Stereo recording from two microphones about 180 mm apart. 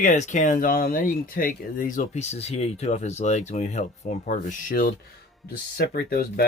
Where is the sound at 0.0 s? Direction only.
45° left (ahead or behind).